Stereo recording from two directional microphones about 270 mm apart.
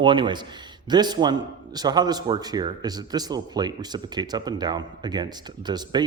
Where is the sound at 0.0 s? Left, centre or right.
Centre.